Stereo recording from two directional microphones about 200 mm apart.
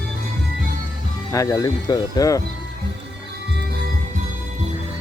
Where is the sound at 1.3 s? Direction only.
15° left (ahead or behind).